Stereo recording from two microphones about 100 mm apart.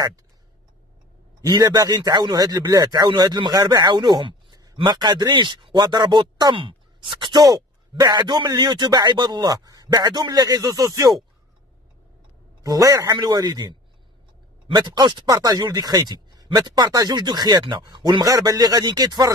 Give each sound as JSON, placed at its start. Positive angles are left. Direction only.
{"t": 1.5, "sound": "speech", "side_deg": -45}
{"t": 12.6, "sound": "a man's voice", "side_deg": -35}
{"t": 18.2, "sound": "a man's voice", "side_deg": -40}